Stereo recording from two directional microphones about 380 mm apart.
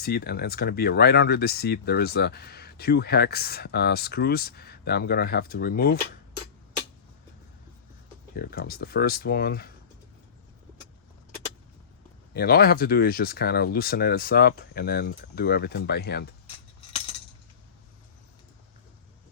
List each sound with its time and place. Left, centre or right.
0.0 s speech: left
8.4 s speech: left
12.3 s speech: left